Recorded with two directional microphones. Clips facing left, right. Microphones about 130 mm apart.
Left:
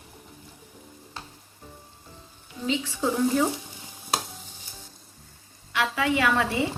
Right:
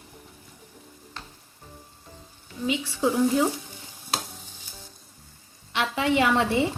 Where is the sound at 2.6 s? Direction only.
15° right (ahead or behind).